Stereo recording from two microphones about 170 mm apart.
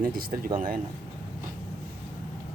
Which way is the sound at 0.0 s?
55° right (ahead or behind).